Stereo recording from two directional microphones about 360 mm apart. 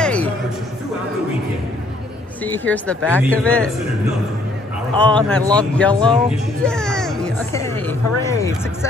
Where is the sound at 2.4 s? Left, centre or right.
Centre.